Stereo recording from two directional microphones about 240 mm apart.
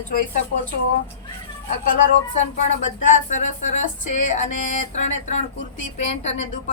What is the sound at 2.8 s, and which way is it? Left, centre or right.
A woman's voice, left.